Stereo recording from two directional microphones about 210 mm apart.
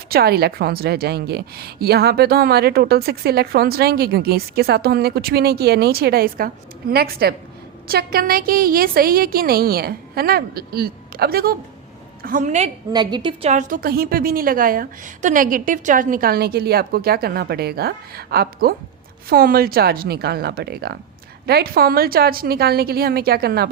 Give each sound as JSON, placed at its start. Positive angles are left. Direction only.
{"t": 0.1, "sound": "a woman's voice", "side_deg": -45}
{"t": 12.9, "sound": "a woman's voice", "side_deg": -20}